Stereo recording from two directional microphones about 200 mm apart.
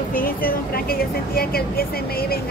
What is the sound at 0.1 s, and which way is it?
Speech, 45° left (ahead or behind).